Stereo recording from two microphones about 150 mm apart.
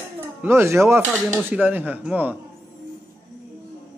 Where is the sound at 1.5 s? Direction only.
10° right (ahead or behind).